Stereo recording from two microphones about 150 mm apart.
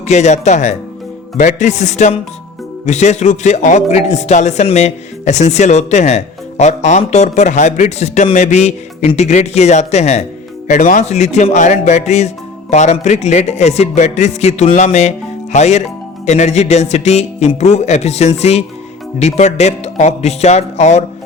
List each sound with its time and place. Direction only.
0.0 s a man's voice: 50° left (ahead or behind)